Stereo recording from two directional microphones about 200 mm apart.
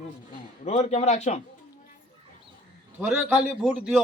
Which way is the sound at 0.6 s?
35° left (ahead or behind).